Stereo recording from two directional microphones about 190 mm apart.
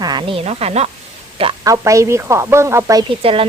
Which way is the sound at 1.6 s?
15° right (ahead or behind).